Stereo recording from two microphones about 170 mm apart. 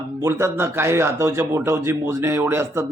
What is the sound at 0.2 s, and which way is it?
A man's voice, 15° right (ahead or behind).